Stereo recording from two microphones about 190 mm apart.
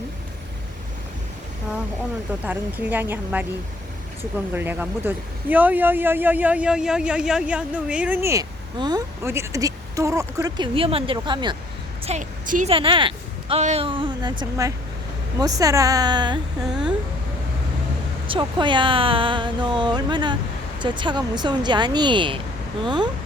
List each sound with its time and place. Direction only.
2.5 s speech: 10° right (ahead or behind)
12.0 s a woman's voice: 40° right (ahead or behind)
12.7 s speech: 25° right (ahead or behind)
16.6 s speech: 5° right (ahead or behind)
18.3 s speech: 25° right (ahead or behind)